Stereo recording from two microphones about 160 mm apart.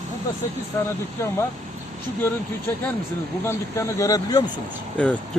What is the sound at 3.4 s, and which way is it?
Speech, 15° left (ahead or behind).